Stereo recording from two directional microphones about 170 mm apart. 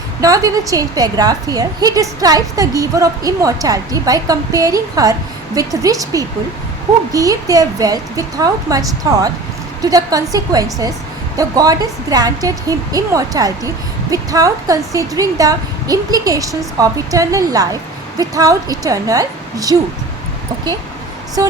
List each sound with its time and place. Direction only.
0.2 s a woman's voice: 20° right (ahead or behind)